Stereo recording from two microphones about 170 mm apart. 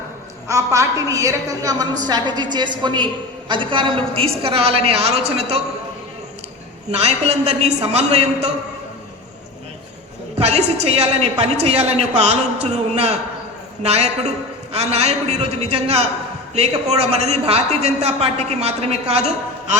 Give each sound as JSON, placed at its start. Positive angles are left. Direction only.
{"t": 0.4, "sound": "a woman's voice", "side_deg": -20}
{"t": 6.9, "sound": "a woman's voice", "side_deg": -40}
{"t": 10.3, "sound": "a woman's voice", "side_deg": -40}